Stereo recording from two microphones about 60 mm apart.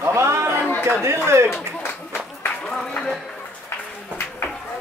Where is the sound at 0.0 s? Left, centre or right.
Right.